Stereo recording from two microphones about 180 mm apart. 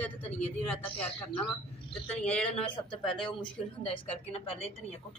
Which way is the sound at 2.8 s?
30° left (ahead or behind).